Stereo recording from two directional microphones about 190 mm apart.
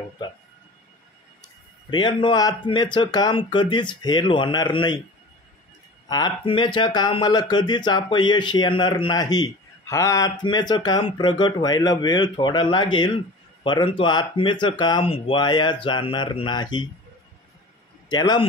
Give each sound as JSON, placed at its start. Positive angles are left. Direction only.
{"t": 1.9, "sound": "speech", "side_deg": 25}
{"t": 6.0, "sound": "speech", "side_deg": 20}
{"t": 18.0, "sound": "a man's voice", "side_deg": 20}